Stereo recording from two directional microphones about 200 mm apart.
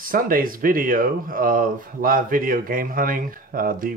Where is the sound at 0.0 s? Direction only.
45° right (ahead or behind).